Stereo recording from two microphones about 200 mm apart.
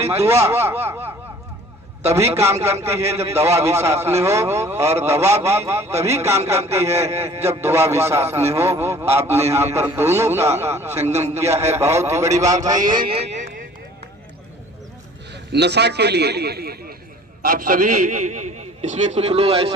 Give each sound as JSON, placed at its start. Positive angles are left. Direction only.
{"t": 0.3, "sound": "a man's voice", "side_deg": -15}
{"t": 2.1, "sound": "a man's voice", "side_deg": -15}
{"t": 11.0, "sound": "a man's voice", "side_deg": -35}
{"t": 11.6, "sound": "a man's voice", "side_deg": -15}
{"t": 15.5, "sound": "a man's voice", "side_deg": -55}